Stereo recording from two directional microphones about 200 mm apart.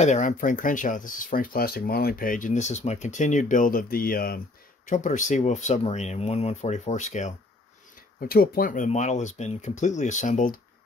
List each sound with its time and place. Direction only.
0.0 s speech: 40° left (ahead or behind)
8.2 s speech: 45° left (ahead or behind)